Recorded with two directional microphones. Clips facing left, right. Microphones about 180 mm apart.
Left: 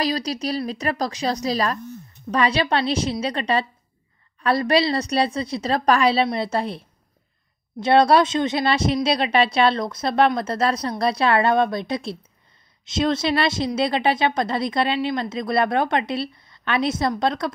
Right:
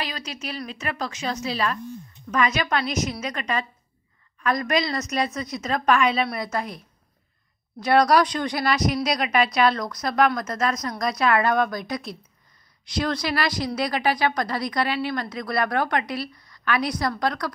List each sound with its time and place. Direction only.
0.0 s a woman's voice: 35° left (ahead or behind)
7.8 s a woman's voice: 25° left (ahead or behind)